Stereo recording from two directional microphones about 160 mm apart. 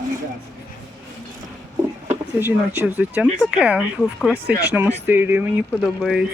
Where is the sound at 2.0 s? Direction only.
10° right (ahead or behind).